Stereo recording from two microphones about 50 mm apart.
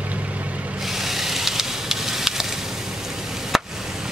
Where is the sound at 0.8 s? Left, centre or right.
Centre.